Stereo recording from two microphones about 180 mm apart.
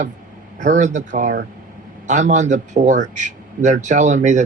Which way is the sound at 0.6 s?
40° right (ahead or behind).